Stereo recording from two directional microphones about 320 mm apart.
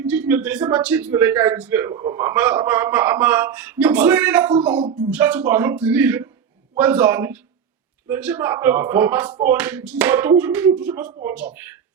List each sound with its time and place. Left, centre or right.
0.0 s speech: centre
4.8 s speech: centre
5.1 s speech: centre